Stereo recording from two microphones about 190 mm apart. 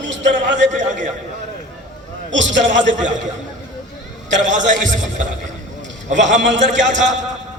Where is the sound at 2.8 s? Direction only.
40° right (ahead or behind).